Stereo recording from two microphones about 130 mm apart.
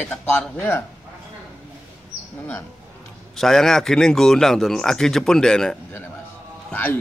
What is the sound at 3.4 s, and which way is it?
Speech, 5° left (ahead or behind).